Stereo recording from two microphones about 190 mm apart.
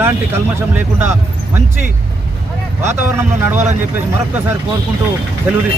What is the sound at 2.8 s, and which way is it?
Speech, 10° right (ahead or behind).